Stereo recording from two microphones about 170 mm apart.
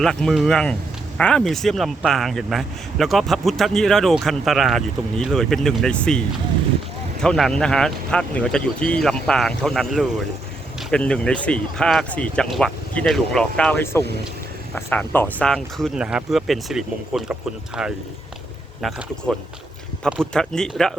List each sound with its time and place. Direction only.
0.0 s speech: centre (ahead or behind)